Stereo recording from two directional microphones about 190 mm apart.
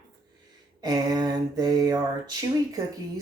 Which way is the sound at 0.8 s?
20° right (ahead or behind).